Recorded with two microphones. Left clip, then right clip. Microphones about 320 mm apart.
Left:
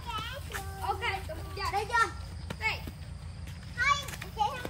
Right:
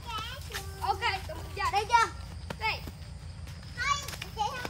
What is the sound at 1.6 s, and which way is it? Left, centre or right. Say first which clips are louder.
Children playing: right 3 dB; centre.